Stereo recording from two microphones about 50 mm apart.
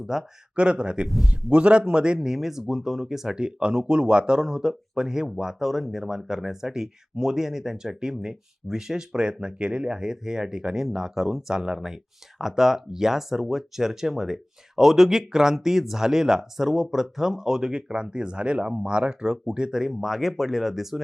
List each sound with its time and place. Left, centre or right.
0.0 s speech: centre
0.5 s a man's voice: right
1.0 s a man's voice: centre
1.5 s a man's voice: right; by 21.0 s centre